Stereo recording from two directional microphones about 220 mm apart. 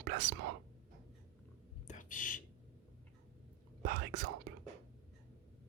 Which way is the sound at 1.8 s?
35° left (ahead or behind).